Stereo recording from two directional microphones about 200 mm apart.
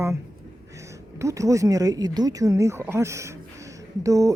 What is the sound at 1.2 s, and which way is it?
A man's voice, 15° right (ahead or behind).